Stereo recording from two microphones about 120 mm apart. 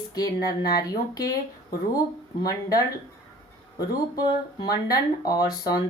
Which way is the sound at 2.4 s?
30° left (ahead or behind).